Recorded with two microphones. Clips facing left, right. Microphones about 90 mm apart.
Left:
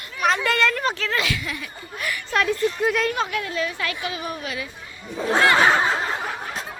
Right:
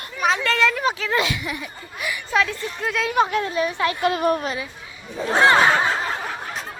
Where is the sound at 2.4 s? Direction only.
5° left (ahead or behind).